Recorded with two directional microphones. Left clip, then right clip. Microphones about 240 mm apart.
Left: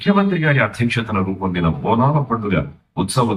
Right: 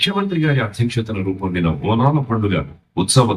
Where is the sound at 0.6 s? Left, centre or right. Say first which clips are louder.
Left 4 dB; right.